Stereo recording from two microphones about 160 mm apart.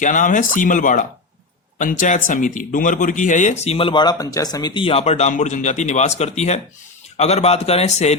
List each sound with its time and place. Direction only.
0.0 s speech: 55° left (ahead or behind)